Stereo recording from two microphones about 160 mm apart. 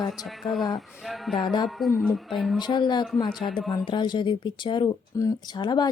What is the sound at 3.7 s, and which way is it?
Speech, 30° left (ahead or behind).